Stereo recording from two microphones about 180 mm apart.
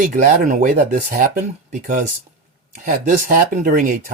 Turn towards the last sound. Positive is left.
turn(degrees=-45)  # may be behind; listen again after turning